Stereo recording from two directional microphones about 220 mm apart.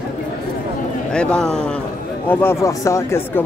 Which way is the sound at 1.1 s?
5° left (ahead or behind).